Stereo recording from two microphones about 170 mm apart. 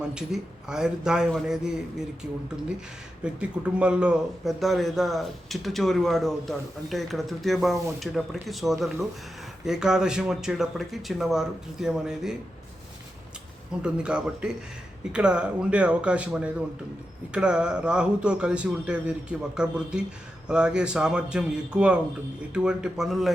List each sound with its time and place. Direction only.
0.1 s speech: 5° right (ahead or behind)
3.2 s speech: 5° right (ahead or behind)
13.8 s a man's voice: 5° right (ahead or behind)